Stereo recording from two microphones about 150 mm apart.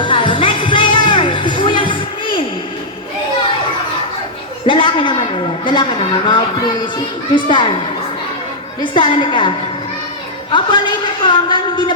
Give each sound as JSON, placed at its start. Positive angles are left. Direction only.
{"t": 0.0, "sound": "music", "side_deg": 35}
{"t": 4.6, "sound": "a woman's voice", "side_deg": 35}
{"t": 8.8, "sound": "a woman's voice", "side_deg": 35}
{"t": 10.5, "sound": "a woman's voice", "side_deg": 30}